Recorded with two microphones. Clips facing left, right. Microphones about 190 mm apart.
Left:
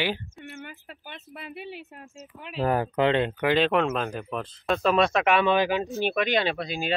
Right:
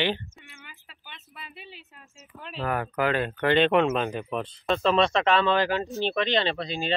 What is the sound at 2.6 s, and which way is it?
Speech, 30° left (ahead or behind).